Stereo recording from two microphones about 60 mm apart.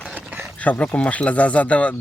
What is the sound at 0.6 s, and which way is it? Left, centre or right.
Speech, left.